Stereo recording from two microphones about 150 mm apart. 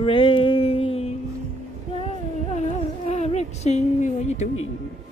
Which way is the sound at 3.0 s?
45° left (ahead or behind).